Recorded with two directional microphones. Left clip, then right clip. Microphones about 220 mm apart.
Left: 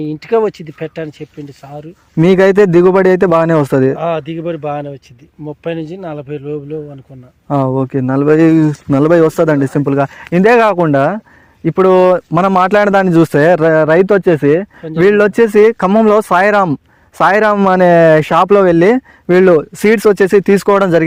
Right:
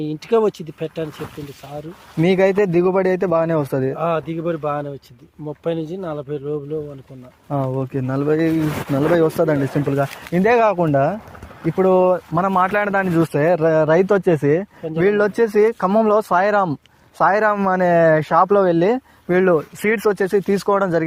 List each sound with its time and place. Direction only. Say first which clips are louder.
0.0 s speech: left 4 dB; 25° left (ahead or behind)
2.2 s speech: left 8 dB; 45° left (ahead or behind)
3.9 s speech: left 4 dB; 25° left (ahead or behind)
7.4 s speech: left 9 dB; 50° left (ahead or behind)